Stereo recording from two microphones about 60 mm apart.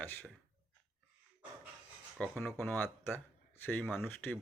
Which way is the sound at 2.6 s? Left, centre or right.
Left.